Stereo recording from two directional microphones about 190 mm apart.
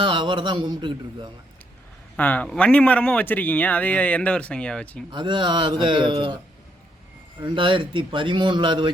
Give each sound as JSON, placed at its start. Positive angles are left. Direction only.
{"t": 0.0, "sound": "a man's voice", "side_deg": -25}
{"t": 2.1, "sound": "a man's voice", "side_deg": 10}
{"t": 5.1, "sound": "a man's voice", "side_deg": -25}